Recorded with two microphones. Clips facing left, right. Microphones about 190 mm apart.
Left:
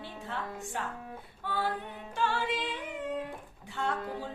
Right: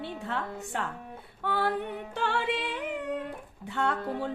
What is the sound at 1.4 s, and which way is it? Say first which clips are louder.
Singing: right 5 dB; 65° right (ahead or behind).